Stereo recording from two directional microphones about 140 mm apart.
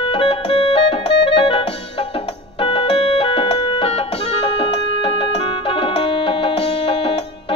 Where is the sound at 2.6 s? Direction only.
40° left (ahead or behind).